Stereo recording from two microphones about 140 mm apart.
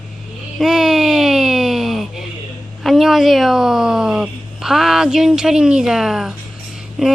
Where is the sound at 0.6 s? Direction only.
Centre (ahead or behind).